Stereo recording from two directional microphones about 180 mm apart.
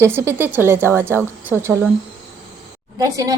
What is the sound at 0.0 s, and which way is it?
A woman's voice, 15° right (ahead or behind).